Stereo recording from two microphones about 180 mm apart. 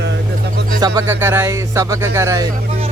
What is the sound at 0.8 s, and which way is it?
Music, 15° right (ahead or behind).